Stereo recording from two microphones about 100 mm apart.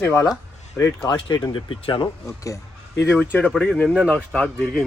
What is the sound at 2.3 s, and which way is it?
Speech, 35° left (ahead or behind).